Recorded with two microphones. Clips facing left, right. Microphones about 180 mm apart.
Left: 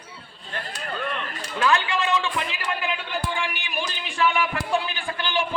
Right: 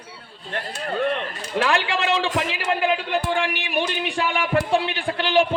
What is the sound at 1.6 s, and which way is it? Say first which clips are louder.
Speech: even; 75° right (ahead or behind).